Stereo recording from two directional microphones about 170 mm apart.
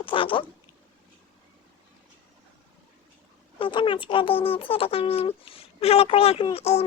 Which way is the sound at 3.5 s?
30° left (ahead or behind).